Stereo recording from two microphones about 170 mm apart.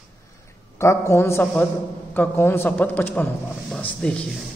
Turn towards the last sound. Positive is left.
turn(degrees=5)  # may be behind; listen again after turning